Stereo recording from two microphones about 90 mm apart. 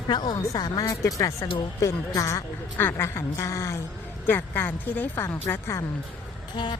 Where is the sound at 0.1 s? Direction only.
55° left (ahead or behind).